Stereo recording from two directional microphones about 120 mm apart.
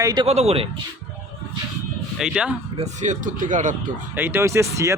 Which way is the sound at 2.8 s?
90° right.